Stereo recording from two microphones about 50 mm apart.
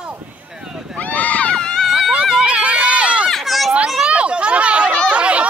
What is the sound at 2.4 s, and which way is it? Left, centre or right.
Run, right.